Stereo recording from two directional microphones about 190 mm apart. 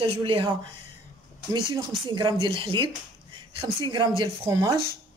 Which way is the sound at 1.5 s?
20° right (ahead or behind).